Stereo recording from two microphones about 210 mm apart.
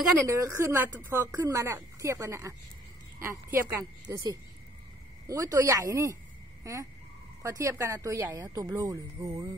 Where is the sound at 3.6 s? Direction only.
15° right (ahead or behind).